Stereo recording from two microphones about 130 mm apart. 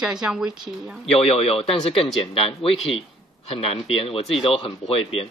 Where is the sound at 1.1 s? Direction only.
50° left (ahead or behind).